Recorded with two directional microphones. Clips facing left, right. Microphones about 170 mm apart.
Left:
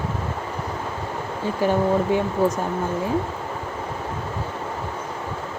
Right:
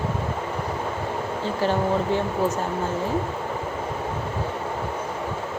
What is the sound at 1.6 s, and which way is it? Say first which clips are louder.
Speech: left 3 dB; 15° left (ahead or behind).